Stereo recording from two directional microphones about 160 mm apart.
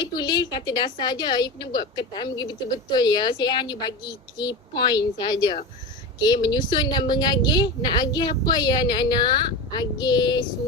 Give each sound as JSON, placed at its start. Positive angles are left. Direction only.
{"t": 0.0, "sound": "a woman's voice", "side_deg": 25}